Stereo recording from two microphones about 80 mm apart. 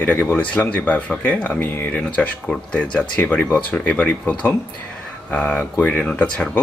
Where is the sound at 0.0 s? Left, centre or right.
Left.